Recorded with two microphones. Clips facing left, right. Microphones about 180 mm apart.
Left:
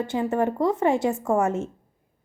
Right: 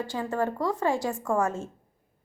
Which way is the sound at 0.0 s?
20° left (ahead or behind).